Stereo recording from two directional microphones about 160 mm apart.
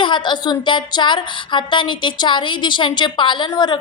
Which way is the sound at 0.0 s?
30° left (ahead or behind).